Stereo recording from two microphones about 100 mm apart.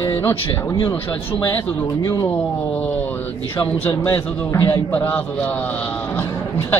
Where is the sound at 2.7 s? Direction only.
15° left (ahead or behind).